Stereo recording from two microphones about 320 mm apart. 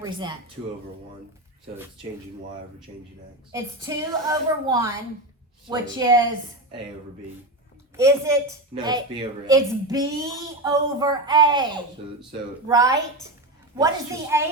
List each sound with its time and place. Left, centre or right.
0.0 s a woman's voice: centre
2.9 s a woman's voice: centre
7.9 s a woman's voice: centre